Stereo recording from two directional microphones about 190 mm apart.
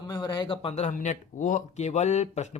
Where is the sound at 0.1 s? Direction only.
25° left (ahead or behind).